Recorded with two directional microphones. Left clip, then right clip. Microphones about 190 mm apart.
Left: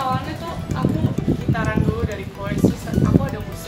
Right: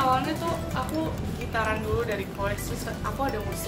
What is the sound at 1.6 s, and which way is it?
Speech, centre (ahead or behind).